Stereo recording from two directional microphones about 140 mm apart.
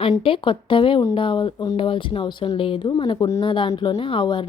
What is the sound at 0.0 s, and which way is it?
A woman's voice, 40° left (ahead or behind).